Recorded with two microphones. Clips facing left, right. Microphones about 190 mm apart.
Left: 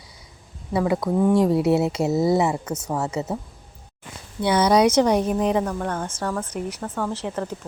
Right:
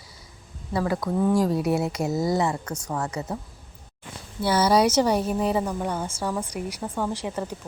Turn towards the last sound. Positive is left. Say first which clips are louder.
# left 2 dB
turn(degrees=-10)  # may be behind; listen again after turning